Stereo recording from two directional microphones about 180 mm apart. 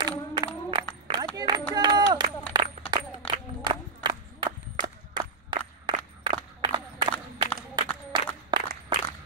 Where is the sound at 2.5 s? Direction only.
25° right (ahead or behind).